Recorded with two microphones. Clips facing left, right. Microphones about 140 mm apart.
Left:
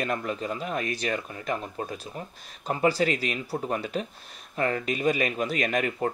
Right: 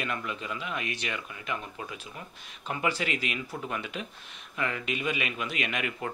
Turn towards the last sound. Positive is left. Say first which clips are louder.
# left 6 dB
turn(degrees=40)  # may be behind; listen again after turning